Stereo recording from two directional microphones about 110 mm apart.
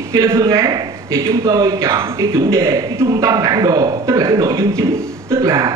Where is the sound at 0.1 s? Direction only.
30° right (ahead or behind).